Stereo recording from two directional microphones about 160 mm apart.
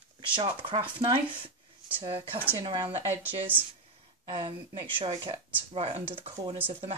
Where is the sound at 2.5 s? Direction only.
30° right (ahead or behind).